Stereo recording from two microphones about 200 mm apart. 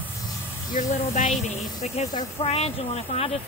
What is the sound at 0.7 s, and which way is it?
Speech, 40° left (ahead or behind).